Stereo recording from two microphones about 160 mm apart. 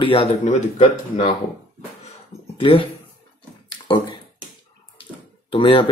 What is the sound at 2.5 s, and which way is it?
Speech, 35° left (ahead or behind).